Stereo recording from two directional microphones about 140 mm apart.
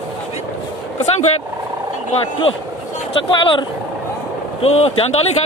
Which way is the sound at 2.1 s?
40° left (ahead or behind).